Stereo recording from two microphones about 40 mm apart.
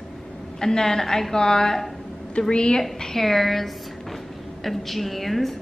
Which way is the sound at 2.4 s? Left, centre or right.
Left.